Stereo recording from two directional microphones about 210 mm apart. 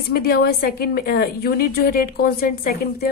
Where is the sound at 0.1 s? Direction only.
45° left (ahead or behind).